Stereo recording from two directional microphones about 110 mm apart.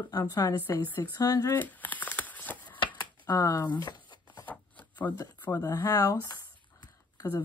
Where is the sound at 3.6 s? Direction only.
40° left (ahead or behind).